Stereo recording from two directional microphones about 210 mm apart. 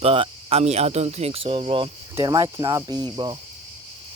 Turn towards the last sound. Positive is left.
turn(degrees=-20)  # may be behind; listen again after turning